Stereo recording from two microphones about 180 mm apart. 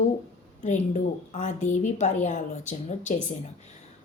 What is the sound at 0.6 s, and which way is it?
A woman's voice, 45° left (ahead or behind).